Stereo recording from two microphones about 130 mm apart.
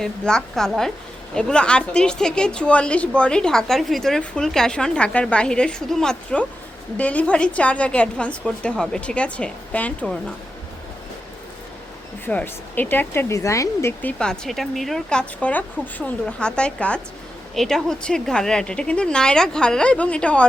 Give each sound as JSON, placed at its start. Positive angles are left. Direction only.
{"t": 0.0, "sound": "a woman's voice", "side_deg": 5}
{"t": 12.2, "sound": "a woman's voice", "side_deg": 15}
{"t": 14.0, "sound": "a woman's voice", "side_deg": 10}